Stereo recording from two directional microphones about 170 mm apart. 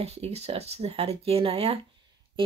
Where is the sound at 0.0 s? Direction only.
40° right (ahead or behind).